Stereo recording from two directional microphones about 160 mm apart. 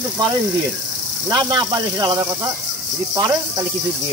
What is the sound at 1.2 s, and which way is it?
Speech, 25° right (ahead or behind).